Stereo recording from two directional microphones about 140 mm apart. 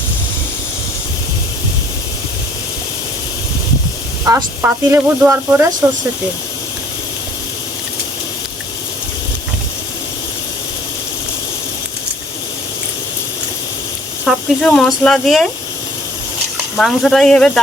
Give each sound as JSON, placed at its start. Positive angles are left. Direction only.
{"t": 4.3, "sound": "a woman's voice", "side_deg": -25}
{"t": 4.6, "sound": "speech", "side_deg": -15}
{"t": 14.3, "sound": "speech", "side_deg": 5}
{"t": 16.7, "sound": "speech", "side_deg": 0}